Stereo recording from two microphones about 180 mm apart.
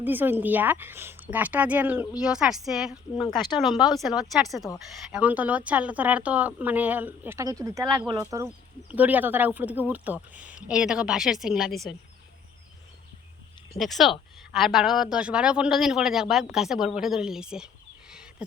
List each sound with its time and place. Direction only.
0.0 s speech: 10° right (ahead or behind)
3.2 s speech: 25° left (ahead or behind)
3.9 s speech: centre (ahead or behind)
13.7 s speech: centre (ahead or behind)
18.1 s wild animals: 5° right (ahead or behind)